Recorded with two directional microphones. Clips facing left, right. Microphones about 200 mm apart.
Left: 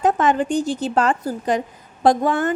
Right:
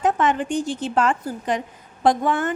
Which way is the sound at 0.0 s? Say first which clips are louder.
Left 3 dB; 35° left (ahead or behind).